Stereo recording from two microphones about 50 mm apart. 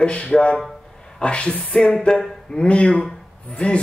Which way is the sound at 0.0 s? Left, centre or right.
Left.